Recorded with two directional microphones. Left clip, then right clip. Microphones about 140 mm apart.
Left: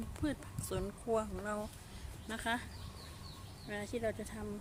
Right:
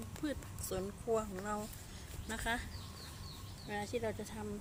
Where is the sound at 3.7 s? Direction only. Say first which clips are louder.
Even; 35° left (ahead or behind).